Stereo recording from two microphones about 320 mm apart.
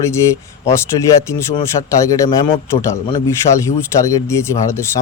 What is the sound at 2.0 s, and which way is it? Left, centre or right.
Speech, centre.